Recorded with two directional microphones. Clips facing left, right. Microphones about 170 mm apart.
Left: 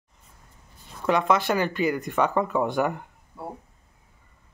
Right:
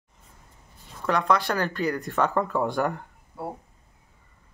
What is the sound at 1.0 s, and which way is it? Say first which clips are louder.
Speech: left 2 dB; 20° left (ahead or behind).